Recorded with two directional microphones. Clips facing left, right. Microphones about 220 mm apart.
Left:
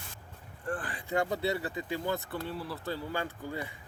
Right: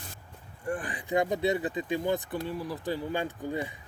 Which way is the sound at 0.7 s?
15° right (ahead or behind).